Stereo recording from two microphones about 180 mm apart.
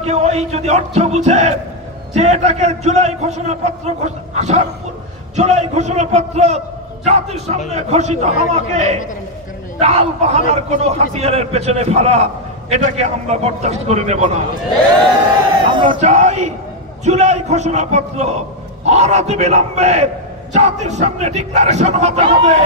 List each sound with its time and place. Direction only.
0.0 s a man's voice: 40° right (ahead or behind)
15.6 s crowd: 25° right (ahead or behind)
16.0 s a man's voice: 40° right (ahead or behind)